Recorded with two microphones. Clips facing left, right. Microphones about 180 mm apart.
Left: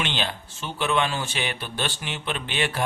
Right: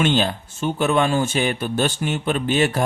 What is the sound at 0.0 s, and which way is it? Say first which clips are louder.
Speech: right 9 dB; 45° right (ahead or behind).